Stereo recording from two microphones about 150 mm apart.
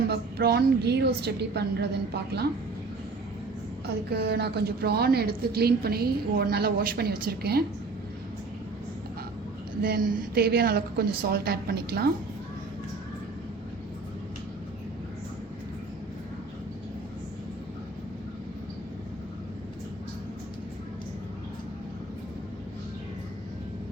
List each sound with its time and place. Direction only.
0.1 s a woman's voice: 90° right
3.8 s a woman's voice: 90° right
9.8 s a woman's voice: 90° right